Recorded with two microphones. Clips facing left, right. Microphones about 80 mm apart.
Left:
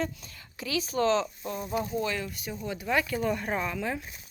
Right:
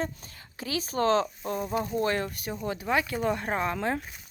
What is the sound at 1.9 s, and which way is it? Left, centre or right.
Speech, right.